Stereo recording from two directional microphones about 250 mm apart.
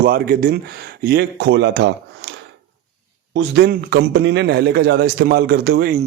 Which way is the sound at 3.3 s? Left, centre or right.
Right.